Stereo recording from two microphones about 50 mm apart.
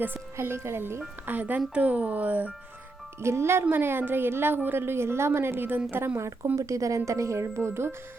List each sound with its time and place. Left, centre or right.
0.3 s a woman's voice: right
1.2 s speech: right
3.2 s a woman's voice: right
6.1 s speech: right
6.6 s speech: right